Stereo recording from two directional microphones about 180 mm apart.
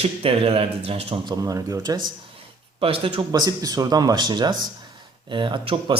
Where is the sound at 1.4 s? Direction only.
20° right (ahead or behind).